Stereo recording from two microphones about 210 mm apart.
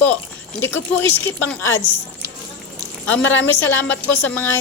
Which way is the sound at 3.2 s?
65° left (ahead or behind).